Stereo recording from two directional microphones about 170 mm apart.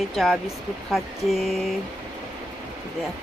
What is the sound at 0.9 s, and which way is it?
Speech, centre (ahead or behind).